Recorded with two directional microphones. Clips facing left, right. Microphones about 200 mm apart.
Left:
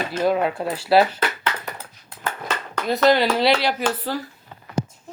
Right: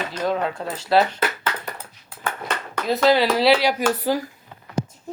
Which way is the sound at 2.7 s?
Centre (ahead or behind).